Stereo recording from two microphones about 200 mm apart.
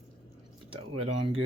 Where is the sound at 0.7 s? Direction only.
25° right (ahead or behind).